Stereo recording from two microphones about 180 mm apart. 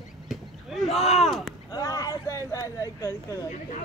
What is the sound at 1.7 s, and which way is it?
Speech, 20° left (ahead or behind).